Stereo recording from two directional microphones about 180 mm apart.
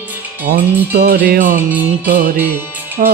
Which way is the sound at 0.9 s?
60° right (ahead or behind).